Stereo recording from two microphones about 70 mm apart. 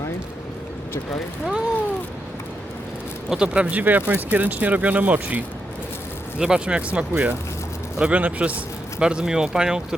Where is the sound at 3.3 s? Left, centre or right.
Centre.